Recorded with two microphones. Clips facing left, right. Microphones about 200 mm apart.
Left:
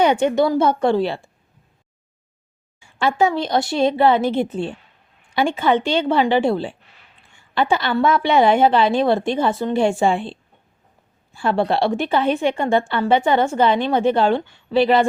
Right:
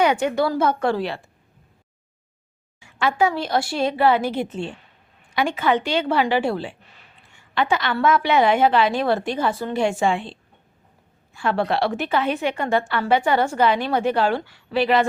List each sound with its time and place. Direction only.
0.0 s a woman's voice: 25° left (ahead or behind)
2.8 s a woman's voice: 30° left (ahead or behind)
5.3 s a woman's voice: 30° left (ahead or behind)
11.3 s a woman's voice: 30° left (ahead or behind)